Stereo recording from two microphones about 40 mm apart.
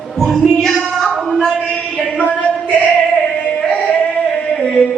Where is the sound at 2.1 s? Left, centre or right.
Left.